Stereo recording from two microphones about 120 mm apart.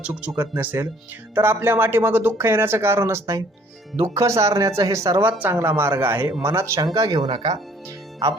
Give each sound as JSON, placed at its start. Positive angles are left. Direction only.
{"t": 0.0, "sound": "speech", "side_deg": -10}
{"t": 7.2, "sound": "speech", "side_deg": -45}